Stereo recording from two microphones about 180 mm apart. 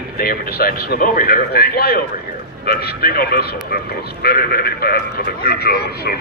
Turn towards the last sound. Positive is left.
turn(degrees=60)  # may be behind; listen again after turning